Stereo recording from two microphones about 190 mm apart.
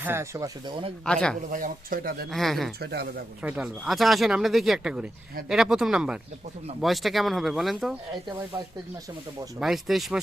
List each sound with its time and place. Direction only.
0.0 s speech: 15° right (ahead or behind)
1.0 s speech: 5° left (ahead or behind)
1.4 s speech: 45° right (ahead or behind)
2.3 s speech: centre (ahead or behind)
2.8 s speech: 55° right (ahead or behind)
3.4 s speech: 10° right (ahead or behind)
9.6 s speech: centre (ahead or behind)